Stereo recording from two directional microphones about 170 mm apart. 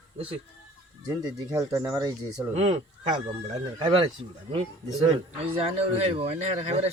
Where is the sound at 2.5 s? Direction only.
40° right (ahead or behind).